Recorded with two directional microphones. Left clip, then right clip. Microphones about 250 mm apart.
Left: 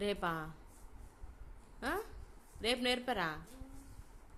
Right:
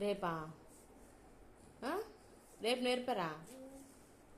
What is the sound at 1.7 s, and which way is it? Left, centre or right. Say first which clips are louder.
Speech: left 2 dB; left.